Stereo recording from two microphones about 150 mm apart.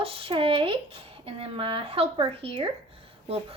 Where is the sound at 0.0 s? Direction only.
40° right (ahead or behind).